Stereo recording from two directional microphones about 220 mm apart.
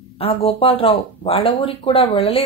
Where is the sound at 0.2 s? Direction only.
25° left (ahead or behind).